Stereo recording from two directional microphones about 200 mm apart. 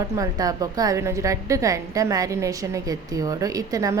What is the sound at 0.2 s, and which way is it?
A woman's voice, 15° right (ahead or behind).